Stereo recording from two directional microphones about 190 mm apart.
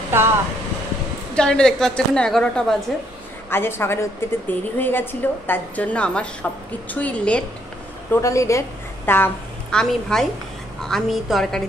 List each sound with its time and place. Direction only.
0.1 s speech: 10° right (ahead or behind)
1.3 s a woman's voice: 5° left (ahead or behind)